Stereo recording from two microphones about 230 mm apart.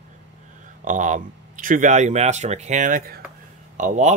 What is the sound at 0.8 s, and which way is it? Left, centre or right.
Speech, right.